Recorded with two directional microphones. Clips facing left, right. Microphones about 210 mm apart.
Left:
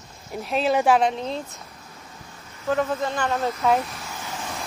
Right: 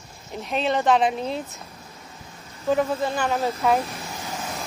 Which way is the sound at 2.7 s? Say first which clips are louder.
Right 1 dB; 10° right (ahead or behind).